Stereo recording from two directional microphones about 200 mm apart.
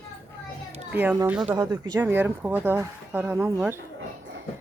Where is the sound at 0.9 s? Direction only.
10° right (ahead or behind).